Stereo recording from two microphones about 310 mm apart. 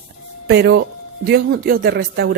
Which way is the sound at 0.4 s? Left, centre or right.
Right.